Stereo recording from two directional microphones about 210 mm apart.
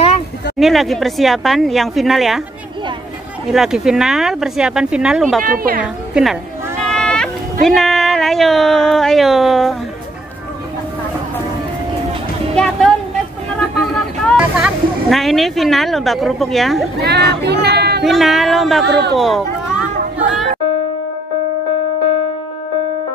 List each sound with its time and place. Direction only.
0.6 s speech: centre (ahead or behind)
3.5 s speech: centre (ahead or behind)
5.4 s speech: 40° right (ahead or behind)
6.2 s speech: 5° right (ahead or behind)
6.9 s a sound: 5° left (ahead or behind)
7.6 s speech: centre (ahead or behind)
12.5 s music: 5° left (ahead or behind)
13.7 s speech: centre (ahead or behind)
17.0 s speech: 50° right (ahead or behind)
18.0 s speech: centre (ahead or behind)
18.9 s speech: 50° right (ahead or behind)
19.1 s a sound: centre (ahead or behind)